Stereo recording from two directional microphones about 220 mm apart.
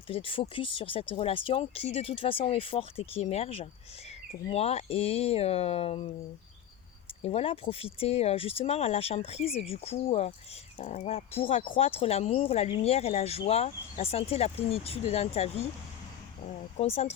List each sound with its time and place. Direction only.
0.1 s speech: 25° left (ahead or behind)
7.2 s speech: 25° left (ahead or behind)
16.4 s a sound: 30° left (ahead or behind)